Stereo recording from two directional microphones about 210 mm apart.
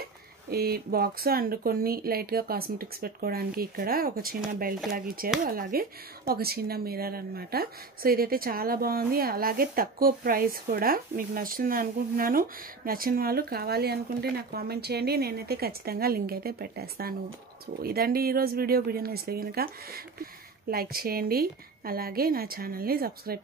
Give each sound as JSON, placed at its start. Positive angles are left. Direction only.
{"t": 0.5, "sound": "speech", "side_deg": -45}